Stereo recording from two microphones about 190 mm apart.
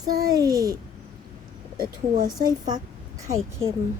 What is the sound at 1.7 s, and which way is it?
Speech, 50° right (ahead or behind).